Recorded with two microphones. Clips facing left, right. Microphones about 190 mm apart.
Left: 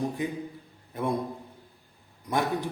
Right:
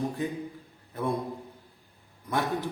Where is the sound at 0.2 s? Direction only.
15° left (ahead or behind).